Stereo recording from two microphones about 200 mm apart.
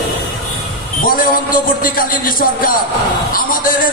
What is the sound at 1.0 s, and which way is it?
A man's voice, 45° left (ahead or behind).